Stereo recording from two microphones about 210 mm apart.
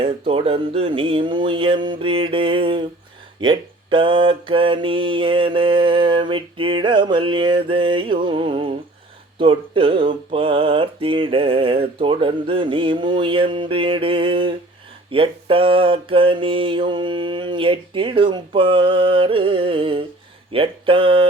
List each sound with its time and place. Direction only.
0.0 s mantra: 25° right (ahead or behind)